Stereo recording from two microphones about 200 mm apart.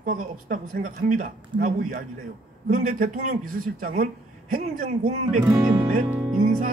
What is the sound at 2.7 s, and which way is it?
Speech, 40° right (ahead or behind).